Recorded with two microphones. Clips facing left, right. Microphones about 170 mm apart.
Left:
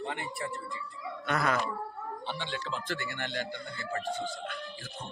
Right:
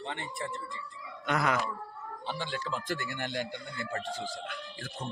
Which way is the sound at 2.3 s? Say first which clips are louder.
Right 1 dB; 45° right (ahead or behind).